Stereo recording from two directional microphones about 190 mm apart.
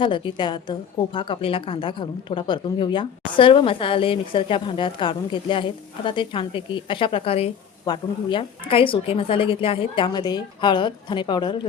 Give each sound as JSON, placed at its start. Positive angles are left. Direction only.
{"t": 0.0, "sound": "a woman's voice", "side_deg": 25}